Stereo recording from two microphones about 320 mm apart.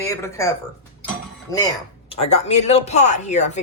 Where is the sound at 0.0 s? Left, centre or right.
Centre.